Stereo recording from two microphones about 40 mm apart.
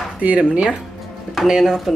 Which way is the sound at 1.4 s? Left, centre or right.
Centre.